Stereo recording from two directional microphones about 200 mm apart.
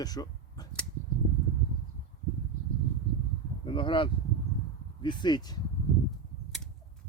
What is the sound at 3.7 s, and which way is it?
Speech, 25° left (ahead or behind).